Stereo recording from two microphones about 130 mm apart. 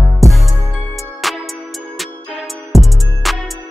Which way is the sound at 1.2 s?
Centre (ahead or behind).